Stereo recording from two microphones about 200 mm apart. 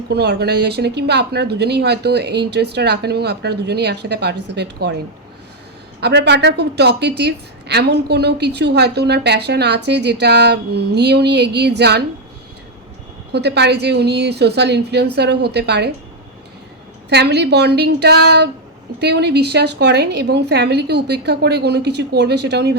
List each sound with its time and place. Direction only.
0.1 s a woman's voice: 55° right (ahead or behind)
6.0 s a woman's voice: 55° right (ahead or behind)
13.3 s a woman's voice: 55° right (ahead or behind)
17.1 s a woman's voice: 55° right (ahead or behind)